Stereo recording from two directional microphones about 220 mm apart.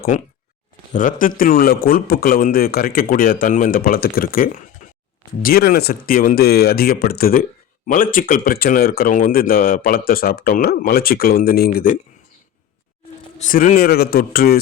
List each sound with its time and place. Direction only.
0.9 s speech: 35° left (ahead or behind)
4.8 s a sound: 35° left (ahead or behind)
5.4 s speech: 45° left (ahead or behind)
13.4 s speech: 35° left (ahead or behind)